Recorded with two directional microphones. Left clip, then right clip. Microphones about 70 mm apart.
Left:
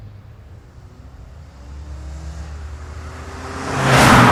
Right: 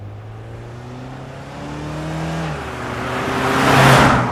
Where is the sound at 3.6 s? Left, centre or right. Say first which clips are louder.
Right 4 dB; left.